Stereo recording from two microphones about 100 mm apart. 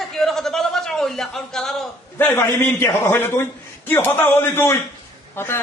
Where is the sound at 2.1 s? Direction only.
20° left (ahead or behind).